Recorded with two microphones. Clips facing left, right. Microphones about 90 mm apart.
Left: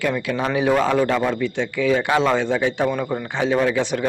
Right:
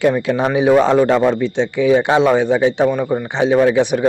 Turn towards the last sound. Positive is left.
turn(degrees=-15)  # may be behind; listen again after turning